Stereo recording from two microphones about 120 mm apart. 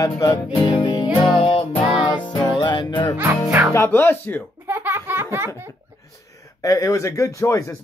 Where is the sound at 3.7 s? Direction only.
20° left (ahead or behind).